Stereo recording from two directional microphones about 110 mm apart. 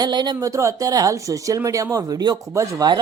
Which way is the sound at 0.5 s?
30° right (ahead or behind).